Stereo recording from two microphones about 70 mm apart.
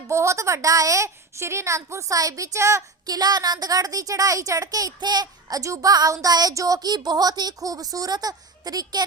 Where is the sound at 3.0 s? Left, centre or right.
Right.